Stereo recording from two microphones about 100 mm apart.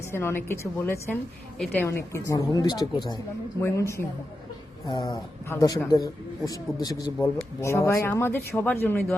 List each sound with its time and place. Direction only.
0.1 s a woman's voice: 25° left (ahead or behind); by 3.2 s 45° left (ahead or behind)
3.6 s a woman's voice: 30° left (ahead or behind)
4.9 s a woman's voice: 40° left (ahead or behind)
7.6 s a woman's voice: 30° left (ahead or behind)